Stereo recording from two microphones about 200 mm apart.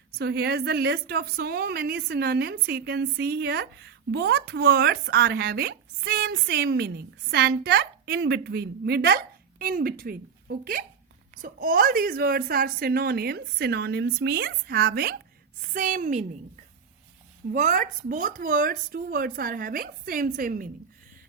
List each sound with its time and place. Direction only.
0.2 s speech: 55° right (ahead or behind)
15.7 s a woman's voice: 40° right (ahead or behind)
17.5 s speech: 40° right (ahead or behind)